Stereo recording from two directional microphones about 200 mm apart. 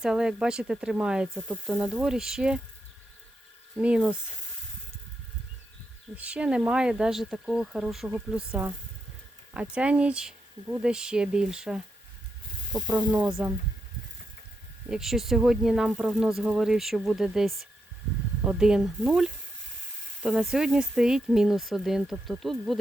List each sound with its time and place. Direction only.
0.0 s speech: 5° right (ahead or behind)
3.8 s speech: 5° right (ahead or behind)
6.1 s speech: 5° right (ahead or behind)
12.7 s speech: 20° right (ahead or behind)
13.1 s speech: 5° right (ahead or behind)
14.8 s speech: centre (ahead or behind)